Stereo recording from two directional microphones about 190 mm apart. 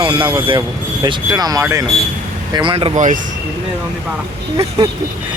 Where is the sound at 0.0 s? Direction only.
25° right (ahead or behind); by 3.3 s 40° right (ahead or behind).